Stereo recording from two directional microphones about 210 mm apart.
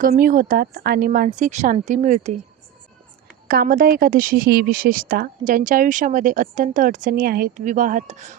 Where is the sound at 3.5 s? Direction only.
45° right (ahead or behind).